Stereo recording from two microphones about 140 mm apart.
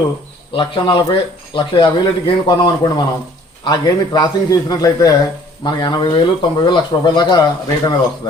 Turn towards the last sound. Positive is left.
turn(degrees=25)  # may be behind; listen again after turning